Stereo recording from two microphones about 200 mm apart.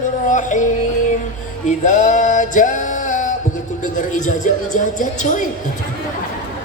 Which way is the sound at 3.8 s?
40° left (ahead or behind).